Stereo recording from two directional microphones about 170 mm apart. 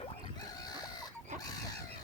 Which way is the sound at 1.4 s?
20° left (ahead or behind).